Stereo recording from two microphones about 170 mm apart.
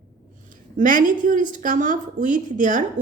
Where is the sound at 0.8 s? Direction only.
50° right (ahead or behind).